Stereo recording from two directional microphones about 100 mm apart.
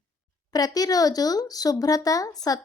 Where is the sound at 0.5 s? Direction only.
40° left (ahead or behind).